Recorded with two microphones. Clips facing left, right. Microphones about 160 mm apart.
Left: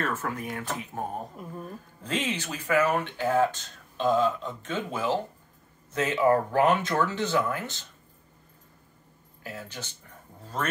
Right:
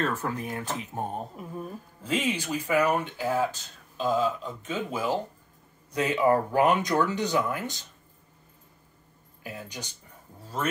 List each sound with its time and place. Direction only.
0.0 s speech: 35° right (ahead or behind)
1.3 s speech: 5° right (ahead or behind)
9.4 s speech: 15° right (ahead or behind)